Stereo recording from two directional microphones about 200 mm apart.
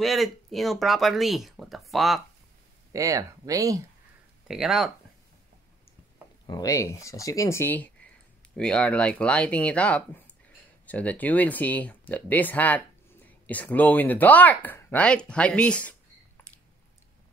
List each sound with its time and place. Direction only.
0.0 s speech: centre (ahead or behind)
2.9 s speech: 15° right (ahead or behind)
4.5 s speech: 5° right (ahead or behind)
6.4 s speech: 20° left (ahead or behind)